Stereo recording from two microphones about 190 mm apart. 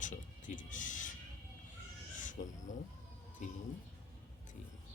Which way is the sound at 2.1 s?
40° left (ahead or behind).